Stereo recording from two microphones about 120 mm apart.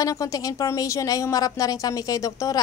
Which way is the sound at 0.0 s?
25° left (ahead or behind).